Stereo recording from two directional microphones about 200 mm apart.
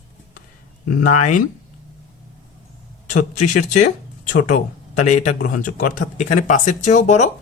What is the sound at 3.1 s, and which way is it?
Speech, 35° left (ahead or behind).